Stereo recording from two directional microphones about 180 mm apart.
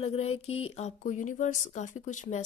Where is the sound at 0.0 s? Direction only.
35° left (ahead or behind).